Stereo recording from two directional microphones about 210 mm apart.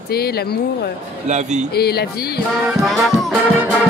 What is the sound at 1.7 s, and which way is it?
Speech, 50° left (ahead or behind).